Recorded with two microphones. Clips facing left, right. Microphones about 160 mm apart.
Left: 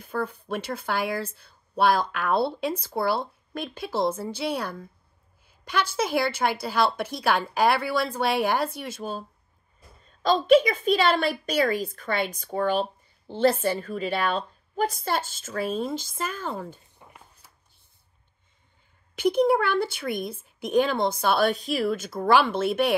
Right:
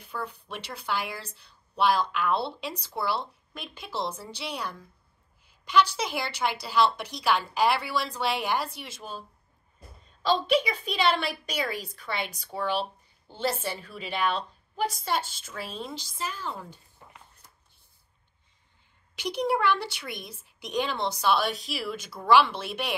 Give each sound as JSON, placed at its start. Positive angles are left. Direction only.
{"t": 0.0, "sound": "speech", "side_deg": 50}
{"t": 10.2, "sound": "speech", "side_deg": 45}
{"t": 19.1, "sound": "speech", "side_deg": 50}